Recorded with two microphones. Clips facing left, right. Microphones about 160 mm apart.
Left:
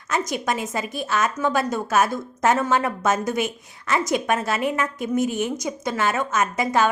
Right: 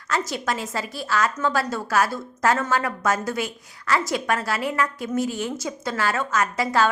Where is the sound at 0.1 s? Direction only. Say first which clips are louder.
Left 2 dB; 20° left (ahead or behind).